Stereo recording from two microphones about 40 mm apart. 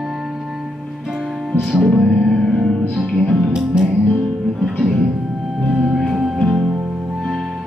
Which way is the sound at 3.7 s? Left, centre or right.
Centre.